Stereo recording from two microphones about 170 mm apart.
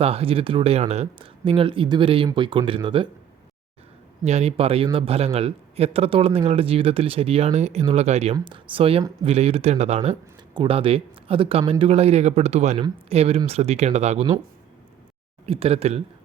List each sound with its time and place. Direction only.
0.0 s a man's voice: 35° right (ahead or behind)
4.2 s a man's voice: 40° right (ahead or behind)
15.4 s a man's voice: 35° right (ahead or behind)